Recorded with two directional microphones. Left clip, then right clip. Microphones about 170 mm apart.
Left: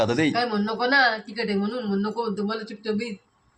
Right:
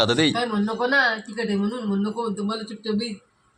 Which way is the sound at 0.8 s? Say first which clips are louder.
Even; 50° left (ahead or behind).